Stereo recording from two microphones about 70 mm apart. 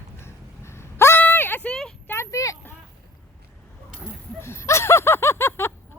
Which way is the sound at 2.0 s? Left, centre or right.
Left.